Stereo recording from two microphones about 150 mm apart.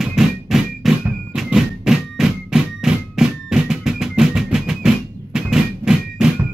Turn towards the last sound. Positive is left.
turn(degrees=-5)  # may be behind; listen again after turning